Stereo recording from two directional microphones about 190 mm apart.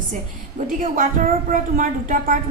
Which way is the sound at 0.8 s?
45° right (ahead or behind).